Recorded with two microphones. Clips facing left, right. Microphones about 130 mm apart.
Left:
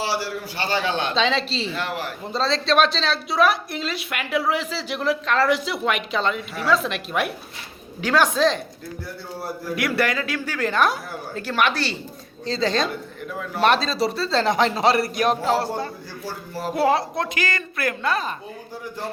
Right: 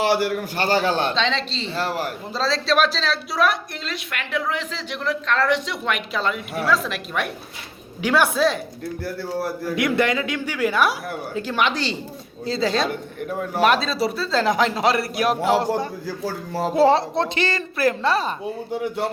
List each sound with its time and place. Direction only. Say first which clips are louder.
0.0 s a man's voice: right 6 dB; 55° right (ahead or behind); by 1.1 s 35° right (ahead or behind)
1.1 s a woman's voice: left 2 dB; 5° left (ahead or behind)
1.7 s speech: right 3 dB; 35° right (ahead or behind)
2.3 s a woman's voice: left 1 dB; centre (ahead or behind)
8.0 s a woman's voice: even; 10° right (ahead or behind)
9.7 s a woman's voice: right 2 dB; 20° right (ahead or behind)
12.5 s a woman's voice: right 1 dB; 5° right (ahead or behind)
13.2 s a man's voice: right 5 dB; 45° right (ahead or behind)
13.6 s a woman's voice: even; 5° right (ahead or behind)
15.4 s a woman's voice: right 2 dB; 15° right (ahead or behind)
16.7 s a woman's voice: right 4 dB; 25° right (ahead or behind)
18.7 s a man's voice: right 9 dB; 70° right (ahead or behind)